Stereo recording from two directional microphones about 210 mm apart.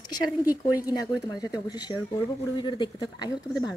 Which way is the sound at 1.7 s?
20° left (ahead or behind).